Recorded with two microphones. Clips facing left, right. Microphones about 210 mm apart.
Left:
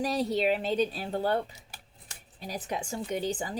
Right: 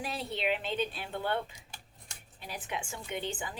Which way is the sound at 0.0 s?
40° left (ahead or behind).